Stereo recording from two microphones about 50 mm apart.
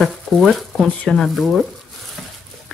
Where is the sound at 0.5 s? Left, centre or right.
Centre.